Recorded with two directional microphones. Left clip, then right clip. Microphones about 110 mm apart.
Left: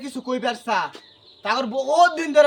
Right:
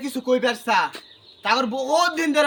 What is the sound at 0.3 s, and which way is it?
A man's voice, 15° left (ahead or behind).